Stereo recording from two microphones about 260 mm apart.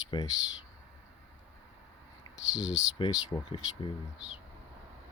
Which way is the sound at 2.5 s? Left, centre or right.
Centre.